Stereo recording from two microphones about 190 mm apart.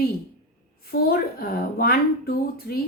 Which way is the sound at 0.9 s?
55° left (ahead or behind).